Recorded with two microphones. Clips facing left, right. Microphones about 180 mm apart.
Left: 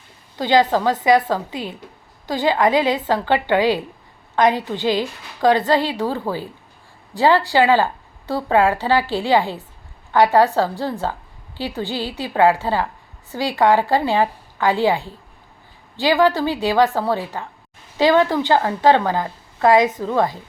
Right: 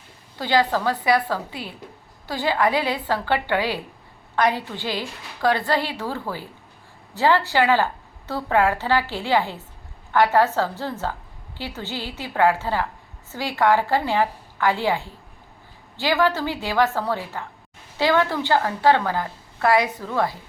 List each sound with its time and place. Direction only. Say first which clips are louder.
0.3 s a woman's voice: left 5 dB; 20° left (ahead or behind)